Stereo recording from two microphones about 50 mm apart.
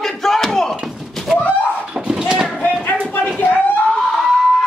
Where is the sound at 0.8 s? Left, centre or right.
Centre.